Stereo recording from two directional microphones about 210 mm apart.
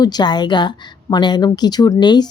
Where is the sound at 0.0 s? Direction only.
20° left (ahead or behind).